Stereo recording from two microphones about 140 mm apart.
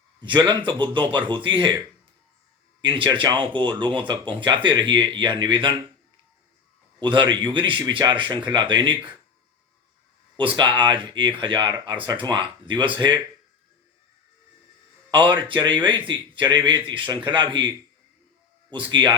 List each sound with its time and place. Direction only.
0.2 s a man's voice: 35° right (ahead or behind)
2.9 s a man's voice: 35° right (ahead or behind)
7.0 s a man's voice: 35° right (ahead or behind)
10.3 s a man's voice: 35° right (ahead or behind)
15.1 s a man's voice: 35° right (ahead or behind)
18.9 s a man's voice: 35° right (ahead or behind)